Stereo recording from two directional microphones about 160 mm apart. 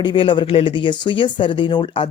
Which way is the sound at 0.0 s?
30° left (ahead or behind).